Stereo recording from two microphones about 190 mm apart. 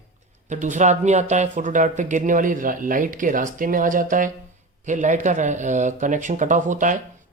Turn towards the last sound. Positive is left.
turn(degrees=-40)  # may be behind; listen again after turning